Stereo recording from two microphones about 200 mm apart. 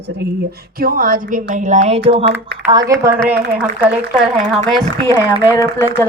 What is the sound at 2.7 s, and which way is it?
A woman's voice, 15° right (ahead or behind).